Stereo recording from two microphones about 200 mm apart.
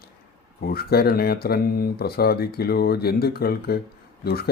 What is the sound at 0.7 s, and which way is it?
Speech, 50° left (ahead or behind).